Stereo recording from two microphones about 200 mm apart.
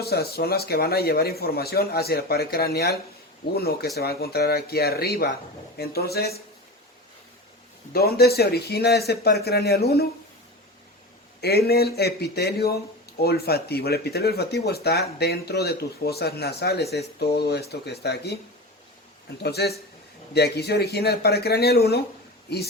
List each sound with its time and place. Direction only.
0.0 s speech: 50° left (ahead or behind)
7.9 s speech: 50° left (ahead or behind)
11.3 s speech: 55° left (ahead or behind)
19.4 s speech: 55° left (ahead or behind)